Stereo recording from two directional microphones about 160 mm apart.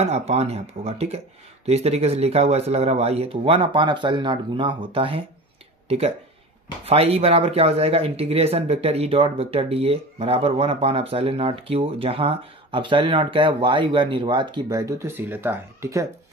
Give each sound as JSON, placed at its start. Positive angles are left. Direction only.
{"t": 0.0, "sound": "speech", "side_deg": -40}